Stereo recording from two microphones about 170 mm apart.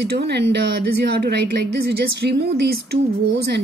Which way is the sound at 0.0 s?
75° right (ahead or behind).